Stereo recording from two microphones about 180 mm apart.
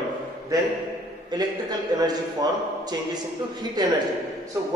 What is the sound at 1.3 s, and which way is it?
A man's voice, 20° right (ahead or behind).